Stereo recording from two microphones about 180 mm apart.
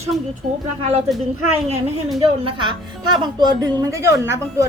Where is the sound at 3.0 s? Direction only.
25° right (ahead or behind).